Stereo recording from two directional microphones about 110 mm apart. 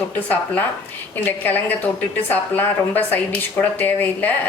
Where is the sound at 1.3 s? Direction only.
15° left (ahead or behind).